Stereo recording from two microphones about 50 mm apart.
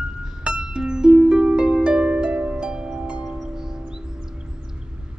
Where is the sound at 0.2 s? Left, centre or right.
Centre.